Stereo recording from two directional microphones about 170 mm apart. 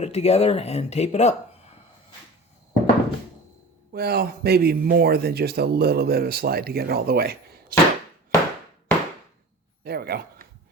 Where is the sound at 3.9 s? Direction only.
70° right (ahead or behind).